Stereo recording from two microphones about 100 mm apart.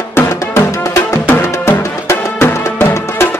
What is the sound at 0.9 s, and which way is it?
Music, 25° left (ahead or behind).